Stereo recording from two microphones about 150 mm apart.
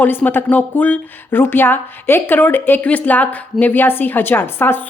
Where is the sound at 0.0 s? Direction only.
15° left (ahead or behind).